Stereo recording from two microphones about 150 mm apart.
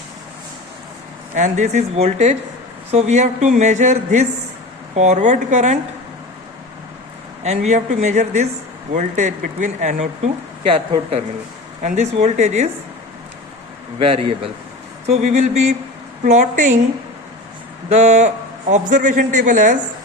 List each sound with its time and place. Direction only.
1.4 s speech: 50° right (ahead or behind)
7.4 s speech: 50° right (ahead or behind)
11.8 s speech: 50° right (ahead or behind)
14.0 s speech: 40° right (ahead or behind); by 16.7 s 55° right (ahead or behind)
17.8 s speech: 50° right (ahead or behind)